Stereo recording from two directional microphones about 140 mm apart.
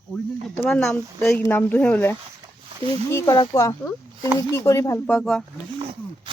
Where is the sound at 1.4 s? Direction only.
15° left (ahead or behind).